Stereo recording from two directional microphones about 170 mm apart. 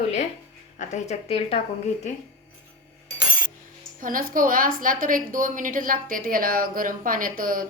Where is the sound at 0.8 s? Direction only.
45° left (ahead or behind).